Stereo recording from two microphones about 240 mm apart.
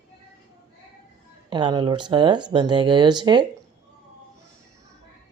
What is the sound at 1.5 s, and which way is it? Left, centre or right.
Speech, centre.